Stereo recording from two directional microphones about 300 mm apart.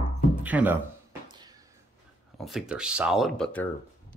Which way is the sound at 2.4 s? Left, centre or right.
Centre.